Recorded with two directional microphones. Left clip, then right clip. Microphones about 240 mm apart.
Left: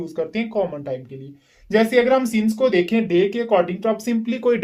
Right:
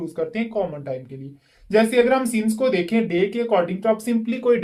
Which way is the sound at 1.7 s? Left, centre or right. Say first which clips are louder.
Left 1 dB; left.